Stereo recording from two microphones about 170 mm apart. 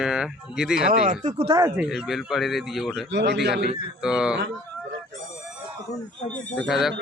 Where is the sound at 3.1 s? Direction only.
90° right.